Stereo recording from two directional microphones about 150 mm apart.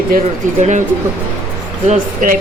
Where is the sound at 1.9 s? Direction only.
65° right (ahead or behind).